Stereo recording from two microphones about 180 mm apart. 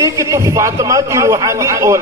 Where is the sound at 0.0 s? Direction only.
15° right (ahead or behind).